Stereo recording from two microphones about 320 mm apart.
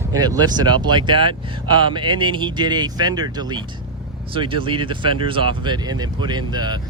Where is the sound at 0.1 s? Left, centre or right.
Centre.